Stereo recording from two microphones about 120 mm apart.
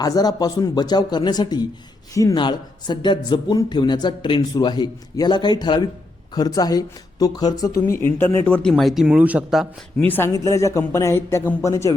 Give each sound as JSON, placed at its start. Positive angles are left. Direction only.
{"t": 0.0, "sound": "speech", "side_deg": 35}
{"t": 7.8, "sound": "speech", "side_deg": 20}
{"t": 8.7, "sound": "speech", "side_deg": 0}
{"t": 10.0, "sound": "speech", "side_deg": 15}